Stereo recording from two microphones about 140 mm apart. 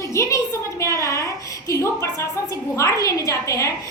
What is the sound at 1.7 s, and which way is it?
A woman's voice, 20° left (ahead or behind).